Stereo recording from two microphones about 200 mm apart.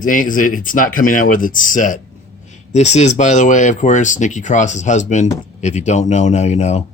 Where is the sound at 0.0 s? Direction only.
40° left (ahead or behind).